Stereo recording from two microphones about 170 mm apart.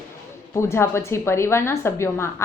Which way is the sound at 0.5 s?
15° left (ahead or behind).